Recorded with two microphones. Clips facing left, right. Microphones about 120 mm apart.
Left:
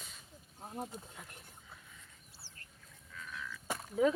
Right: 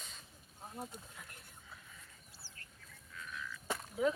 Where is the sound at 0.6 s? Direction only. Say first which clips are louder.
Left 4 dB; 25° left (ahead or behind).